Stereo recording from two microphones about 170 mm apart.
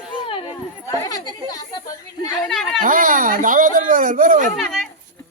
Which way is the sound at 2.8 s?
55° right (ahead or behind).